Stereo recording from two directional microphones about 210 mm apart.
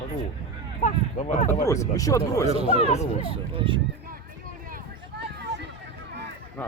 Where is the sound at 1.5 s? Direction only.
15° left (ahead or behind).